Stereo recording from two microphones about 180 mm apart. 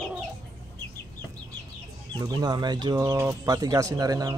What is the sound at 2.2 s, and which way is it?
Speech, 20° right (ahead or behind).